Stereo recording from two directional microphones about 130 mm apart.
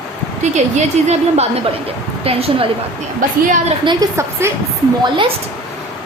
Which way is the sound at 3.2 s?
90° right.